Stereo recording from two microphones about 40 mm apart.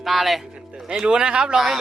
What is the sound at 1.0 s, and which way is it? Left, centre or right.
Speech, right.